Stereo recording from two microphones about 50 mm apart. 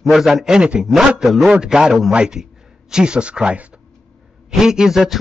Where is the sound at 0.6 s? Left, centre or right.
Centre.